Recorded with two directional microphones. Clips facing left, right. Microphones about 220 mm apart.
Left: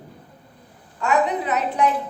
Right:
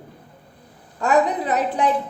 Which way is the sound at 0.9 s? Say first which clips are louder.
Right 2 dB; 35° right (ahead or behind).